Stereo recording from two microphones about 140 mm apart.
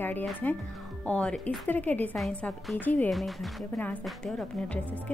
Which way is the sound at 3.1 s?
Centre (ahead or behind).